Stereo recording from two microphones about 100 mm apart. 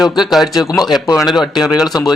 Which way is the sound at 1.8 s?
40° left (ahead or behind).